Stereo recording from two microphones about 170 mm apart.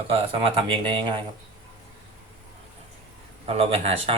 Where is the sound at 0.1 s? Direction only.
35° right (ahead or behind).